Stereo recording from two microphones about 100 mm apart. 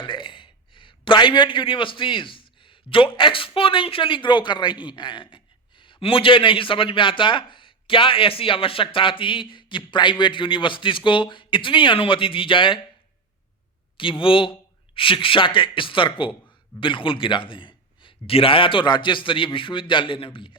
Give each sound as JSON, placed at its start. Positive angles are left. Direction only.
{"t": 0.0, "sound": "a man's voice", "side_deg": 55}
{"t": 13.9, "sound": "a man's voice", "side_deg": 60}